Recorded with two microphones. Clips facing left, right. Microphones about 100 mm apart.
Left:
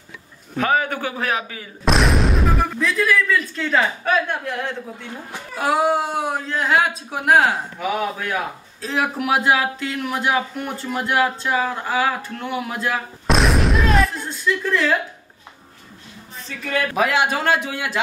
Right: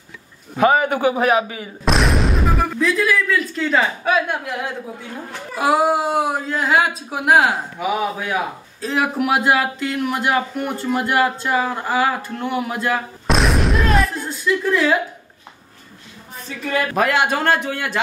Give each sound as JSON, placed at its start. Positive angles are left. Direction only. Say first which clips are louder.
{"t": 0.6, "sound": "a man's voice", "louder": "right 5 dB", "side_deg": -10}
{"t": 1.9, "sound": "speech", "louder": "even", "side_deg": 0}
{"t": 16.4, "sound": "speech", "louder": "right 2 dB", "side_deg": -5}